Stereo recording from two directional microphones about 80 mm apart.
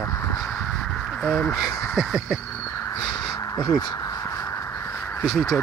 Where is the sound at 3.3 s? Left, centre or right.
Left.